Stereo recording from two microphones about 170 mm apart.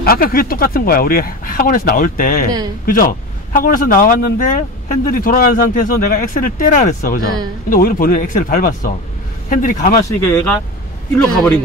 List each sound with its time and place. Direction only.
0.0 s speech: 60° left (ahead or behind)
10.0 s speech: 20° left (ahead or behind)
11.1 s a man's voice: 5° left (ahead or behind)